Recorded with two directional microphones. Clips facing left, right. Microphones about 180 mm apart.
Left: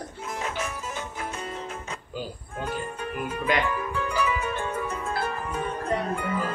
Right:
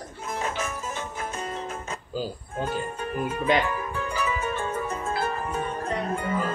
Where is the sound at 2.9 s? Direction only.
35° right (ahead or behind).